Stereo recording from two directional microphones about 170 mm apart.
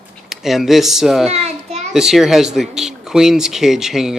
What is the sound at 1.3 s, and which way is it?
Children playing, 40° right (ahead or behind).